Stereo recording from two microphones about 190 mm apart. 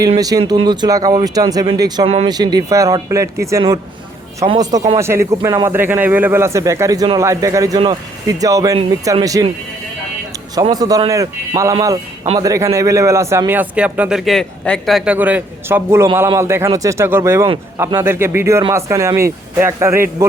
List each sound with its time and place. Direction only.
0.2 s speech: 20° right (ahead or behind)
2.0 s speech: 35° right (ahead or behind)
2.3 s speech: 20° right (ahead or behind)
4.9 s a man's voice: 15° right (ahead or behind)
10.5 s a man's voice: 20° right (ahead or behind)